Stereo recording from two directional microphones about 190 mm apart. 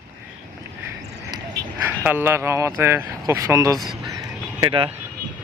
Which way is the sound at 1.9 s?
10° right (ahead or behind).